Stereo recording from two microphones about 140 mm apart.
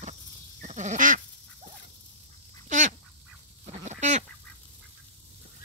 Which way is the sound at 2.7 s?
65° right (ahead or behind).